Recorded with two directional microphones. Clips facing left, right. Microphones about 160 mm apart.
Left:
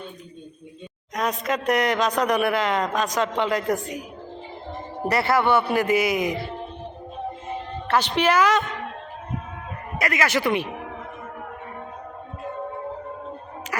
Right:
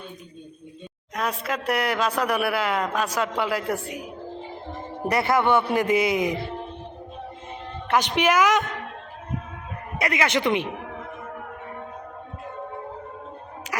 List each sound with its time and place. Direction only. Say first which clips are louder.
1.1 s a man's voice: left 3 dB; 5° right (ahead or behind)
5.0 s a man's voice: even; 15° right (ahead or behind)
7.9 s a man's voice: even; 15° right (ahead or behind)
10.0 s a man's voice: even; 20° right (ahead or behind)